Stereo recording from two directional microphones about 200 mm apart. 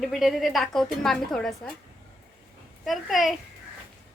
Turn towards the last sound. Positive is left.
turn(degrees=0)  # may be behind; listen again after turning